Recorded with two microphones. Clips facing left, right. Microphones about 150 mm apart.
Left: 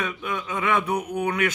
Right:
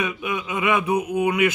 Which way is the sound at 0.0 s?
10° right (ahead or behind).